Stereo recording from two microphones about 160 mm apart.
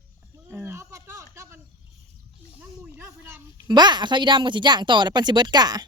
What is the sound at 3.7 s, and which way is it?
Speech, 25° right (ahead or behind).